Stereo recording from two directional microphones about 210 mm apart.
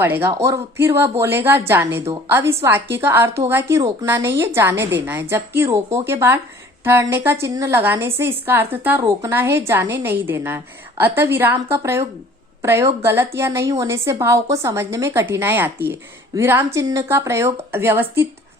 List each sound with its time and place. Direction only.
0.0 s speech: 10° right (ahead or behind)